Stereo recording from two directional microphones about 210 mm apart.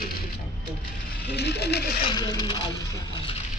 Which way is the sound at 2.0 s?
20° left (ahead or behind).